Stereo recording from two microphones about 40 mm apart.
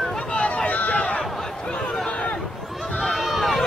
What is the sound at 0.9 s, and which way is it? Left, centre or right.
Crowd, left.